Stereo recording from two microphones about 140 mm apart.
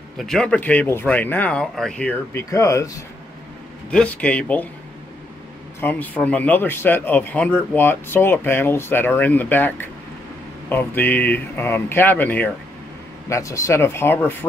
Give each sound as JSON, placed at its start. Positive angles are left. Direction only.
{"t": 0.2, "sound": "speech", "side_deg": 5}
{"t": 2.3, "sound": "speech", "side_deg": 20}
{"t": 3.9, "sound": "speech", "side_deg": 10}
{"t": 5.8, "sound": "speech", "side_deg": 10}